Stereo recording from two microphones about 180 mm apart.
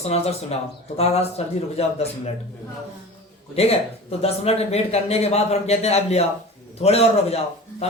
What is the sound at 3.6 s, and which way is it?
Speech, 35° left (ahead or behind).